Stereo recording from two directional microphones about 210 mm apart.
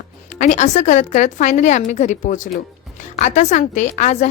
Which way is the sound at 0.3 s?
35° left (ahead or behind).